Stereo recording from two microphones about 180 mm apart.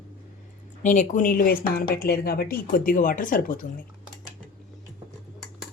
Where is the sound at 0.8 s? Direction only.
45° left (ahead or behind).